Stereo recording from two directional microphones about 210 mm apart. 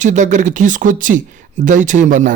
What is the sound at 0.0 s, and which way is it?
Speech, 35° right (ahead or behind).